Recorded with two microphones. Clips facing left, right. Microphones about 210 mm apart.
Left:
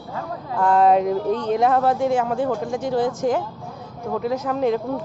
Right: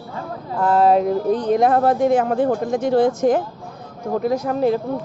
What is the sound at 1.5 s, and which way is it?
Speech, 50° right (ahead or behind).